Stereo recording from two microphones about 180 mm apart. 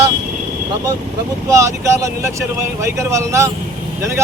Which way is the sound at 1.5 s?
15° right (ahead or behind).